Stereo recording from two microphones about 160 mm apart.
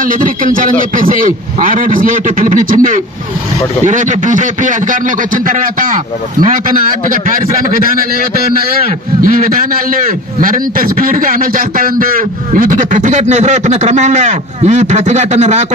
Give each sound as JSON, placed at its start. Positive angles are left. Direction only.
{"t": 0.0, "sound": "a man's voice", "side_deg": -55}